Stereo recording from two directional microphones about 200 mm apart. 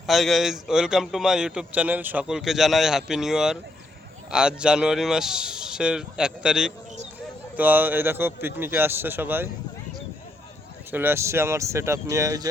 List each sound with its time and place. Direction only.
0.1 s a man's voice: centre (ahead or behind)
10.9 s a man's voice: 10° right (ahead or behind)